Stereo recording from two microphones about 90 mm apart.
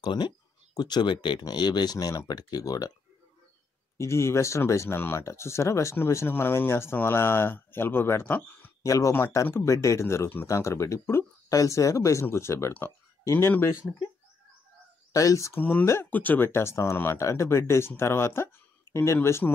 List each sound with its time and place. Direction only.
0.0 s speech: 55° left (ahead or behind)
4.0 s speech: 30° left (ahead or behind)
8.8 s speech: 40° left (ahead or behind)
15.1 s speech: 35° left (ahead or behind)
16.1 s speech: 20° left (ahead or behind)